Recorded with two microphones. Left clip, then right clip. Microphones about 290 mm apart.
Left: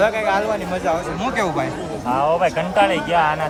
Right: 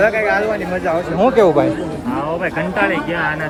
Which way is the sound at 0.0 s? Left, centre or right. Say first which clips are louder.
Right 3 dB; centre.